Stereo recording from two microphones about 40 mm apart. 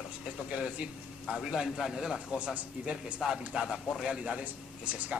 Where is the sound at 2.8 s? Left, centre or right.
Right.